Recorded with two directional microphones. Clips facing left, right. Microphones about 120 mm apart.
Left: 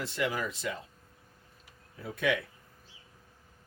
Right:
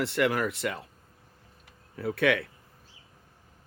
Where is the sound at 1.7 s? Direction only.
65° right (ahead or behind).